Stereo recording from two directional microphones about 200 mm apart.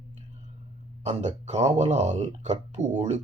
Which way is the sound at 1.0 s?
35° right (ahead or behind).